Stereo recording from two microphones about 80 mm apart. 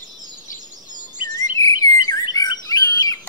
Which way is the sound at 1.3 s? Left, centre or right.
Left.